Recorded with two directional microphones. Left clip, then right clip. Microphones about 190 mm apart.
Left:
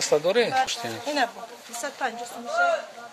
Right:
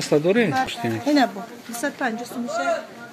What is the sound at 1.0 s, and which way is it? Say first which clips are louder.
A woman's voice: right 6 dB; 35° right (ahead or behind).